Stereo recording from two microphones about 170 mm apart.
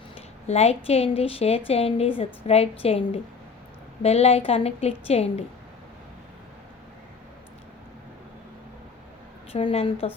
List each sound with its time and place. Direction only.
0.4 s a woman's voice: 40° left (ahead or behind)
9.5 s a woman's voice: 35° left (ahead or behind)